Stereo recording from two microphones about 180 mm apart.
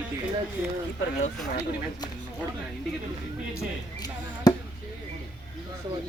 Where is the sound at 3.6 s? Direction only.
20° left (ahead or behind).